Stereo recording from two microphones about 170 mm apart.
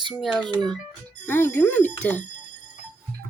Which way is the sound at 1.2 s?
15° left (ahead or behind).